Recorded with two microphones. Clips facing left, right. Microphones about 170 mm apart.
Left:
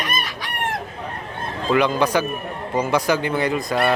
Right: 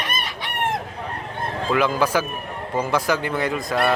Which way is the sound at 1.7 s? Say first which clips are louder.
Left 2 dB; 5° right (ahead or behind).